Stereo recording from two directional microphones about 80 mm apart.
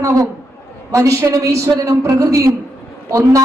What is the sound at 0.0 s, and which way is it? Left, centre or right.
A man's voice, right.